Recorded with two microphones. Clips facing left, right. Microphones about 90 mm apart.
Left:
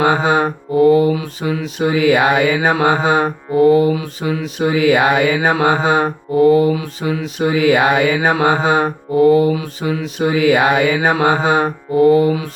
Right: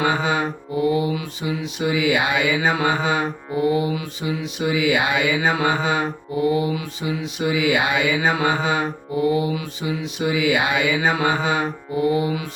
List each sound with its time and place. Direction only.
0.0 s mantra: 40° left (ahead or behind)
0.4 s mantra: 50° left (ahead or behind)
5.6 s mantra: 40° left (ahead or behind)